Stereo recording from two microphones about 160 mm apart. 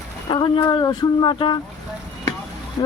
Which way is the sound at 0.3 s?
30° left (ahead or behind).